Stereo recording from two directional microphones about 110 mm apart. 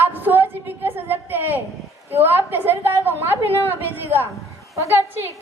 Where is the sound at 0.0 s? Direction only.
20° right (ahead or behind).